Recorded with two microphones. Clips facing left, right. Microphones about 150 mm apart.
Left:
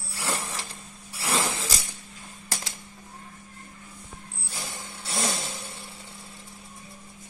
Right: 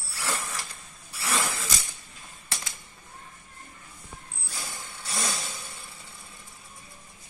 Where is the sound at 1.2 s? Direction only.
25° left (ahead or behind).